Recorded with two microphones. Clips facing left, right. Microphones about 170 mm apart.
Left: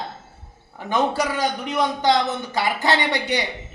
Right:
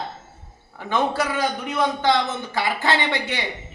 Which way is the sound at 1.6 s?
15° left (ahead or behind).